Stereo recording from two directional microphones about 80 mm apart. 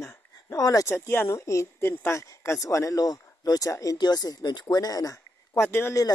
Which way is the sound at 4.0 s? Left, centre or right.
Left.